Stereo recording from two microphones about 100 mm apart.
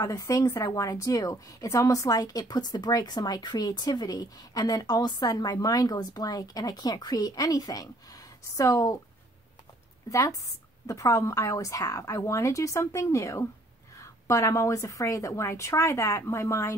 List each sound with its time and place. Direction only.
0.0 s a woman's voice: 35° left (ahead or behind)
10.0 s a woman's voice: 35° left (ahead or behind)